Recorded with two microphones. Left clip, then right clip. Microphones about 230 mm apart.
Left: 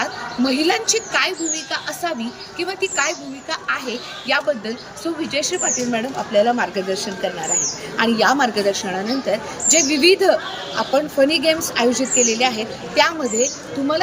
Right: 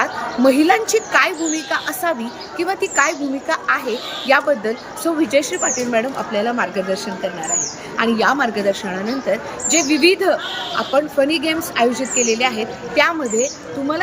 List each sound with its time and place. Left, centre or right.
0.0 s a woman's voice: centre